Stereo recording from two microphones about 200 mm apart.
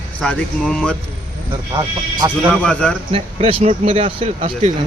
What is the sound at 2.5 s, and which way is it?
Speech, 5° left (ahead or behind).